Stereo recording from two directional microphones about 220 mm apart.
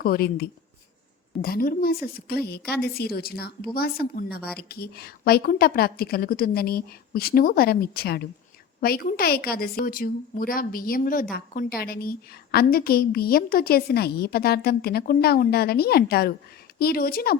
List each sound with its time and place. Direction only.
0.0 s a woman's voice: 45° left (ahead or behind)